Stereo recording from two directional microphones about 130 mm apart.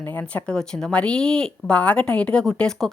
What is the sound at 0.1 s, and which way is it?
A woman's voice, 15° left (ahead or behind).